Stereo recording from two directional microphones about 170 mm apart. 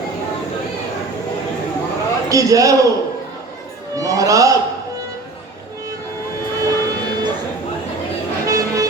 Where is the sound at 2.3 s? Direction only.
20° right (ahead or behind).